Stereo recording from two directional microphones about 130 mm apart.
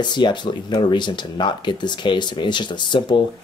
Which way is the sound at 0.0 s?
35° left (ahead or behind).